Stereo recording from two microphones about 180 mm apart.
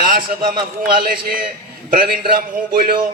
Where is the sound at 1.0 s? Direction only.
55° right (ahead or behind).